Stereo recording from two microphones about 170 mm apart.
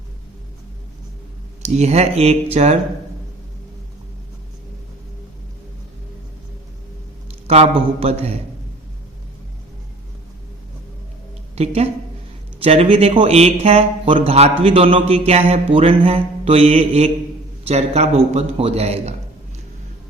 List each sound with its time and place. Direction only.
1.6 s speech: 40° right (ahead or behind)
7.4 s speech: 35° right (ahead or behind)
11.5 s speech: 40° right (ahead or behind)